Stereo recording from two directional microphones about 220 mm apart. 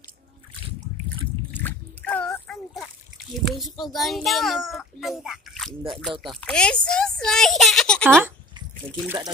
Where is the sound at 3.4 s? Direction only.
Centre (ahead or behind).